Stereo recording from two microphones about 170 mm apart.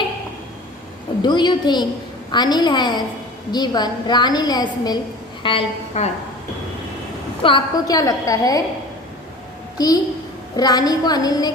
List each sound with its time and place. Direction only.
1.2 s a woman's voice: 25° left (ahead or behind)
7.4 s a woman's voice: 25° left (ahead or behind)
9.7 s a woman's voice: 20° left (ahead or behind)